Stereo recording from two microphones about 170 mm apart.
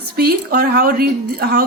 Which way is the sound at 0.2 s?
65° right (ahead or behind).